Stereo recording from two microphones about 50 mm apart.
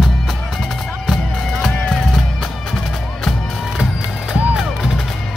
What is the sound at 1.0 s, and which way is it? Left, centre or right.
Music, centre.